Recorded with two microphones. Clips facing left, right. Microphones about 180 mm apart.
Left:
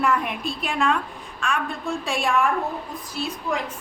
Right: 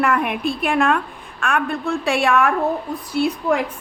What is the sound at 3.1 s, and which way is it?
Speech, 60° right (ahead or behind).